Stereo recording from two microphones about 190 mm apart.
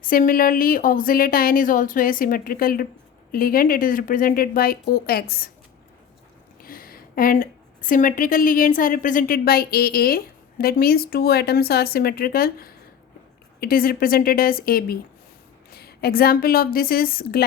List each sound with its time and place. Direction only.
0.0 s a woman's voice: 45° left (ahead or behind)
6.6 s a woman's voice: 50° left (ahead or behind)